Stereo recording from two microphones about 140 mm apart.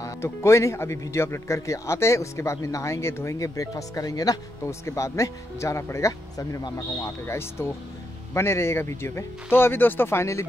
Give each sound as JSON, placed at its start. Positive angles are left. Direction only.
{"t": 0.0, "sound": "speech", "side_deg": 20}